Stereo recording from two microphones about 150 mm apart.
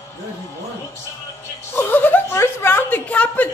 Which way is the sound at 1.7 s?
15° left (ahead or behind).